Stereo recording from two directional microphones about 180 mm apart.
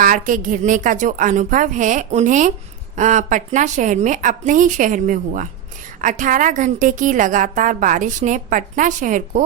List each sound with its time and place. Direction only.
0.0 s a woman's voice: 50° right (ahead or behind)